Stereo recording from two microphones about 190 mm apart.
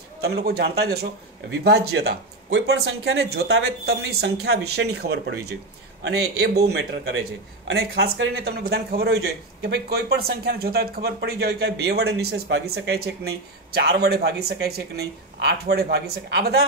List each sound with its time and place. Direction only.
0.2 s a man's voice: 55° right (ahead or behind)